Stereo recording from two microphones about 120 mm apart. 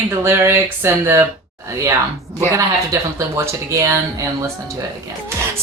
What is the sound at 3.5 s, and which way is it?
Speech, 25° right (ahead or behind).